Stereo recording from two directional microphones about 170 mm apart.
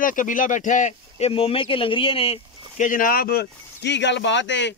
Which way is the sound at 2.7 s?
50° left (ahead or behind).